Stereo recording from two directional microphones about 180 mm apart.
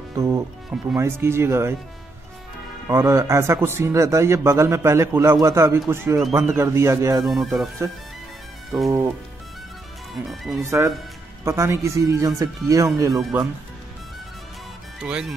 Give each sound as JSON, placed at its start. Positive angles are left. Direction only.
{"t": 0.1, "sound": "speech", "side_deg": -15}
{"t": 2.9, "sound": "speech", "side_deg": -15}
{"t": 7.2, "sound": "speech", "side_deg": 0}
{"t": 8.8, "sound": "music", "side_deg": -20}
{"t": 10.1, "sound": "speech", "side_deg": 0}
{"t": 11.4, "sound": "speech", "side_deg": -15}
{"t": 15.0, "sound": "speech", "side_deg": -5}